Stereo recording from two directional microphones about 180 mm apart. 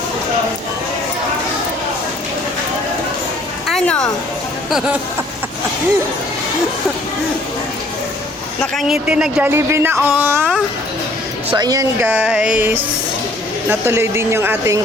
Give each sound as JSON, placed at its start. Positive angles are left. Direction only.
{"t": 3.7, "sound": "a sound", "side_deg": 5}
{"t": 8.6, "sound": "speech", "side_deg": 0}
{"t": 11.5, "sound": "speech", "side_deg": -20}
{"t": 12.0, "sound": "speech", "side_deg": -5}